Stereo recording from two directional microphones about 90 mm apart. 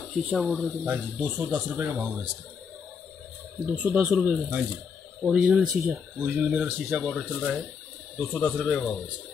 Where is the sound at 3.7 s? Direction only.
10° right (ahead or behind).